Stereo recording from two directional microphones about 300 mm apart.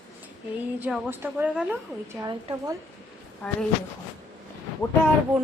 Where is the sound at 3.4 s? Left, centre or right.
Centre.